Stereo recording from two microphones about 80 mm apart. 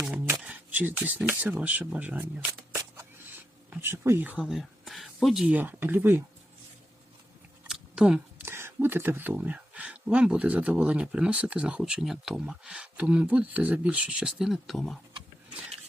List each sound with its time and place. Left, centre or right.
0.4 s chopping: right
1.3 s speech: right
2.9 s a sound: right
3.7 s speech: right
4.2 s speech: centre
4.4 s speech: centre
5.5 s speech: right
7.7 s a sound: centre
8.4 s speech: right; by 14.9 s centre